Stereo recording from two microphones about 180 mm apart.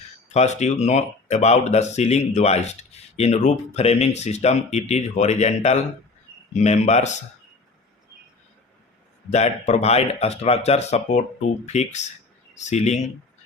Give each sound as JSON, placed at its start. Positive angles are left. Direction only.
{"t": 0.3, "sound": "speech", "side_deg": 40}
{"t": 9.3, "sound": "speech", "side_deg": 40}